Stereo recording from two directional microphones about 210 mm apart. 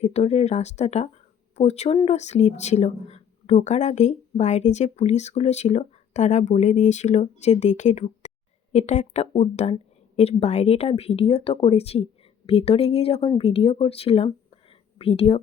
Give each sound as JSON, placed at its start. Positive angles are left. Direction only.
{"t": 0.0, "sound": "a woman's voice", "side_deg": 30}